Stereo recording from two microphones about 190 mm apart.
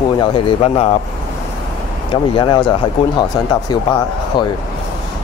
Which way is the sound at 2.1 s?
25° left (ahead or behind).